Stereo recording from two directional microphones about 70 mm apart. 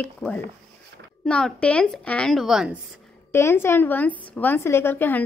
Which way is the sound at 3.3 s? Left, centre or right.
Left.